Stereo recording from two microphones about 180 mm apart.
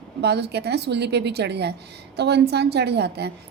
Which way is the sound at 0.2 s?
70° right (ahead or behind).